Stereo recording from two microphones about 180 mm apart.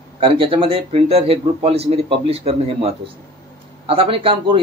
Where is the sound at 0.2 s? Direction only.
30° right (ahead or behind).